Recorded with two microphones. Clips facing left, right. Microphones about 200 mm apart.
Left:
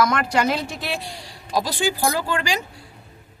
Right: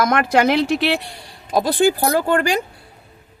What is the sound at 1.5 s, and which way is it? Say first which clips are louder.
Speech: right 7 dB; 55° right (ahead or behind).